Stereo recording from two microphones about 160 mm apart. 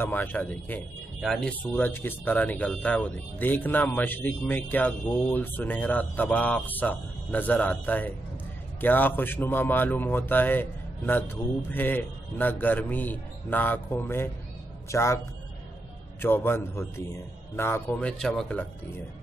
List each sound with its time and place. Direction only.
0.0 s speech: 10° left (ahead or behind)
16.2 s speech: 15° left (ahead or behind)